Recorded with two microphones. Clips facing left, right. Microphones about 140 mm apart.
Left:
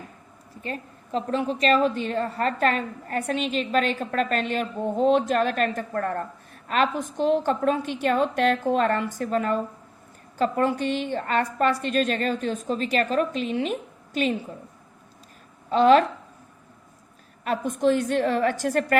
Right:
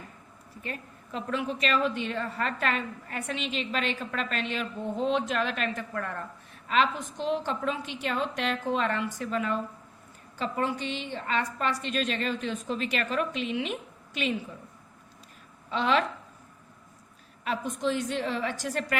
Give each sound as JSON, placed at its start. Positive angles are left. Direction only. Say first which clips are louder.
{"t": 0.6, "sound": "a woman's voice", "louder": "left 5 dB", "side_deg": 35}
{"t": 15.7, "sound": "a woman's voice", "louder": "left 9 dB", "side_deg": 45}
{"t": 17.4, "sound": "a woman's voice", "louder": "left 7 dB", "side_deg": 50}